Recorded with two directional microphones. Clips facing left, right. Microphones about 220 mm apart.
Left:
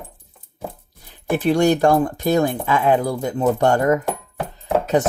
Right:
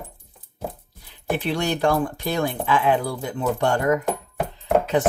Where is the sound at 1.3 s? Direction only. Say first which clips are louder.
Left 7 dB; 45° left (ahead or behind).